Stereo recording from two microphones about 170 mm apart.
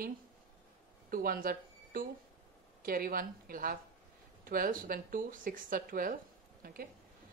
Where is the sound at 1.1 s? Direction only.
55° right (ahead or behind).